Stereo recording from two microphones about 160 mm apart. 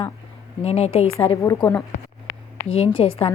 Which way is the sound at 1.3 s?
20° left (ahead or behind).